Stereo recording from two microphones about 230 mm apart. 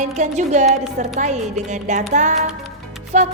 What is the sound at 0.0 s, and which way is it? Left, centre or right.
Speech, right.